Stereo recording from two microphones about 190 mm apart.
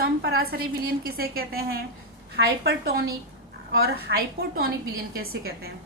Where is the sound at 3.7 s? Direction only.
55° right (ahead or behind).